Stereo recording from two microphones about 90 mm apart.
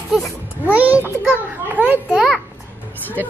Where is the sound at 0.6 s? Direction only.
20° right (ahead or behind).